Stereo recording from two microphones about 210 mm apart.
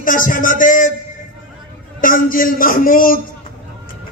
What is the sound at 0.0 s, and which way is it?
Speech, 40° left (ahead or behind).